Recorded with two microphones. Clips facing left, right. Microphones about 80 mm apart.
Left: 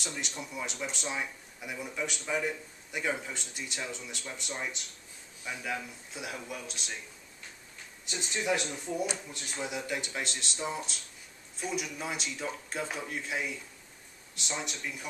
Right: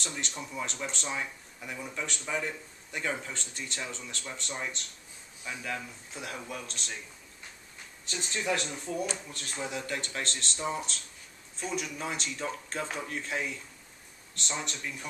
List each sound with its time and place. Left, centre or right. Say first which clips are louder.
0.0 s speech: right 1 dB; centre
8.0 s speech: even; centre